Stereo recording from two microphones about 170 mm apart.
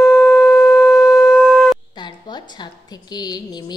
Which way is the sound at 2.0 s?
25° left (ahead or behind).